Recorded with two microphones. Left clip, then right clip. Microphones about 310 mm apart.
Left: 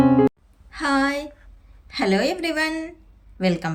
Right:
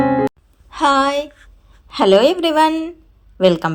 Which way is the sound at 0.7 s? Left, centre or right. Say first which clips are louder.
Right 7 dB; centre.